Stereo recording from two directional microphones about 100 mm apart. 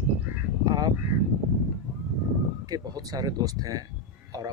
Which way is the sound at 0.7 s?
40° right (ahead or behind).